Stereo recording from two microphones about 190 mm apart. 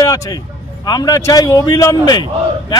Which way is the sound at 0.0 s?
20° left (ahead or behind).